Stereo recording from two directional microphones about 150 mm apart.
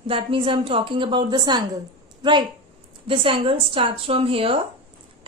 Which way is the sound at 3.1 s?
35° right (ahead or behind).